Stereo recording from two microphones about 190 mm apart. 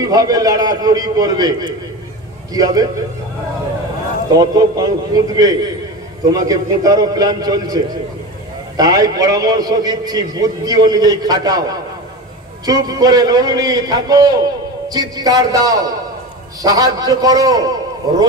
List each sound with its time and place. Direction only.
0.0 s a man's voice: 20° right (ahead or behind)
4.3 s a man's voice: 20° right (ahead or behind)